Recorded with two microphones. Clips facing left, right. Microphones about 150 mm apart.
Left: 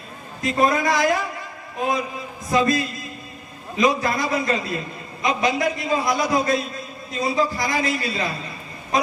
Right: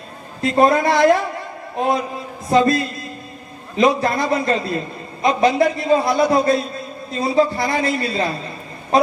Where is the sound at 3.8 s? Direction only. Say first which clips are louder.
Right 4 dB; 30° right (ahead or behind).